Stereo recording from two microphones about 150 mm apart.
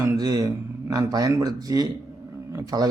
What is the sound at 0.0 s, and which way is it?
A man's voice, 20° right (ahead or behind).